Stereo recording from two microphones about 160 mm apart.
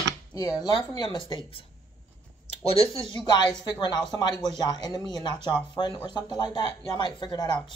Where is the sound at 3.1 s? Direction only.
25° left (ahead or behind).